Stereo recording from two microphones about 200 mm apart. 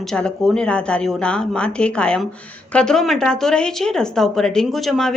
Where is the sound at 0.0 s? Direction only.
5° left (ahead or behind).